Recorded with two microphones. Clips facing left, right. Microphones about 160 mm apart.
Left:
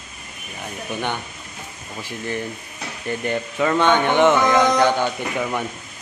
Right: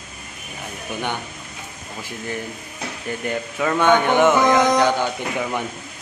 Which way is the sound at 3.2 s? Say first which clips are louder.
Left 2 dB; 5° right (ahead or behind).